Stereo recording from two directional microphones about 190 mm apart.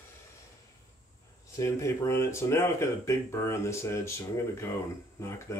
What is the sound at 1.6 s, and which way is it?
Speech, 15° left (ahead or behind).